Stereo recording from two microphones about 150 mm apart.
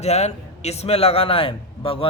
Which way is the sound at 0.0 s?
45° left (ahead or behind).